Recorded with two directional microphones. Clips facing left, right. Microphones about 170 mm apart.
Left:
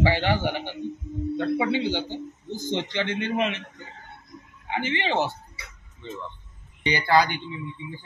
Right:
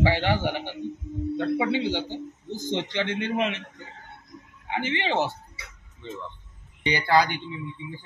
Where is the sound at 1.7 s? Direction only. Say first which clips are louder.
Even; 20° right (ahead or behind).